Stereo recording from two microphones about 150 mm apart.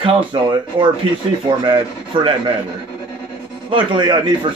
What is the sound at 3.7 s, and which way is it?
Speech, 30° right (ahead or behind).